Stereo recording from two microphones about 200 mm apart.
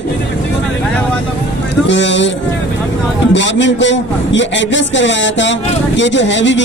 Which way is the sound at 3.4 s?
65° left (ahead or behind).